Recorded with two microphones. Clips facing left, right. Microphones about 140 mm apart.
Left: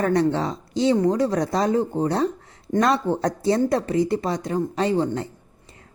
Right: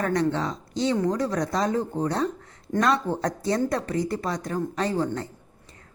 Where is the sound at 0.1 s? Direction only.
30° left (ahead or behind).